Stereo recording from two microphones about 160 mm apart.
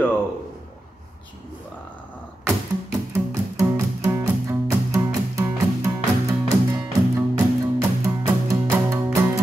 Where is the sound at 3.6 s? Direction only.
20° right (ahead or behind).